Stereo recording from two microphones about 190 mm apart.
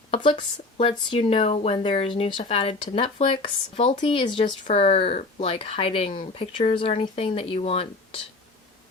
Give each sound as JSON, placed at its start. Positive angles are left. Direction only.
{"t": 0.1, "sound": "speech", "side_deg": 25}